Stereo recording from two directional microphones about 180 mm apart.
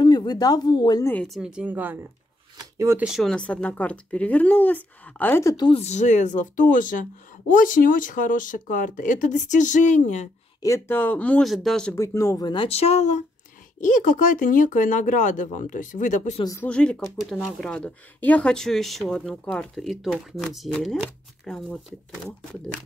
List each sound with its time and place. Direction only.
0.0 s speech: 25° left (ahead or behind)
1.0 s speech: 5° left (ahead or behind); by 2.0 s 10° right (ahead or behind)
2.5 s shuffling cards: 20° right (ahead or behind)
3.0 s speech: centre (ahead or behind); by 5.7 s 15° left (ahead or behind)
5.7 s speech: 35° left (ahead or behind)
10.6 s speech: 15° left (ahead or behind)
11.9 s speech: 15° left (ahead or behind); by 16.4 s 40° left (ahead or behind)
16.6 s speech: 5° left (ahead or behind)